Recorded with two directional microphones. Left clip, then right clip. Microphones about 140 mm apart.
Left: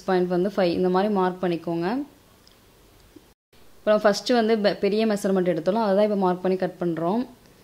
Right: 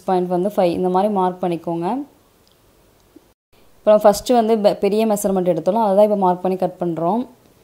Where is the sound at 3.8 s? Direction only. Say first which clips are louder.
Right 7 dB; 25° right (ahead or behind).